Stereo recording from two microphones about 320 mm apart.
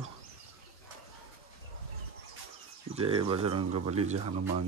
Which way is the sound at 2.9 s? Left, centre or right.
Centre.